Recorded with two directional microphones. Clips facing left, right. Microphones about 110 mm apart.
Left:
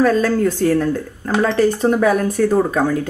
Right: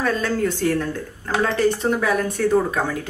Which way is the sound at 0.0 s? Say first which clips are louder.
Left 7 dB; 40° left (ahead or behind).